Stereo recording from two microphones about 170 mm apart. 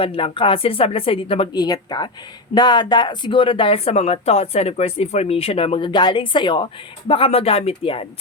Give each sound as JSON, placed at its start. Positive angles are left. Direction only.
{"t": 0.0, "sound": "speech", "side_deg": 30}